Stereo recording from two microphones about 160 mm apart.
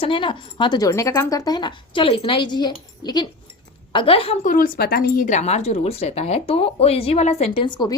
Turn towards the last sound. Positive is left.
turn(degrees=30)  # may be behind; listen again after turning